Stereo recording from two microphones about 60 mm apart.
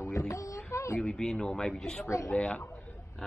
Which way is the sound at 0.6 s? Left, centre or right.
Left.